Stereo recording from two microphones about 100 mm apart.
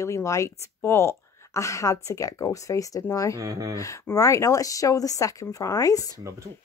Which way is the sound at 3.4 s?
35° right (ahead or behind).